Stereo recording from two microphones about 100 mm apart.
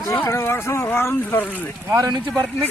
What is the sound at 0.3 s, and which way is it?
Speech, 25° left (ahead or behind).